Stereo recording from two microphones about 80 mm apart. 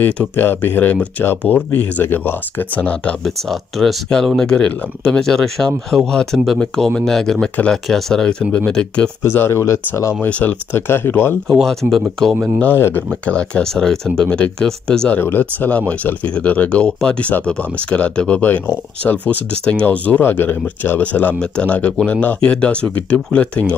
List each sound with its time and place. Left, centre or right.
0.0 s speech: left
3.3 s speech: centre
9.2 s speech: left
10.2 s speech: left
11.8 s speech: centre
12.7 s speech: left
13.2 s speech: centre
15.1 s speech: left